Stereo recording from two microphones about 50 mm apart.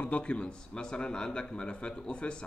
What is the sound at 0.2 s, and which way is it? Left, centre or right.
A man's voice, left.